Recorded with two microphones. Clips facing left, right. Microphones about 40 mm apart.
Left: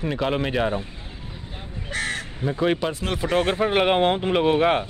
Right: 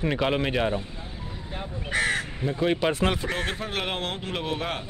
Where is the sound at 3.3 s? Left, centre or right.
Left.